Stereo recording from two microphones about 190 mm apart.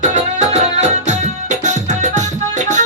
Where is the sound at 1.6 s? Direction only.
40° right (ahead or behind).